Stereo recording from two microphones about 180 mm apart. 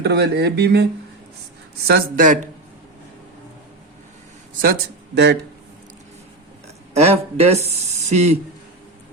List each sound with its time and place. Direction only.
0.0 s speech: 65° right (ahead or behind)
1.9 s speech: 50° right (ahead or behind)
4.6 s speech: 60° right (ahead or behind)
6.9 s speech: 35° right (ahead or behind)